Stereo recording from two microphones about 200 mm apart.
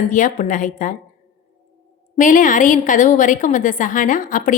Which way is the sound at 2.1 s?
40° left (ahead or behind).